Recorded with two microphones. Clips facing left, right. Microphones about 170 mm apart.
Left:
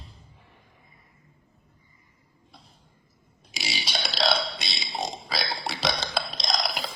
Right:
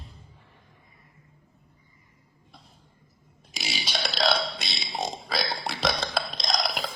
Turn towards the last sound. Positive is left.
turn(degrees=0)  # may be behind; listen again after turning